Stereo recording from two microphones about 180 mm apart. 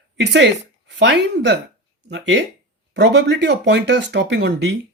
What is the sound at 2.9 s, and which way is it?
Speech, 70° right (ahead or behind).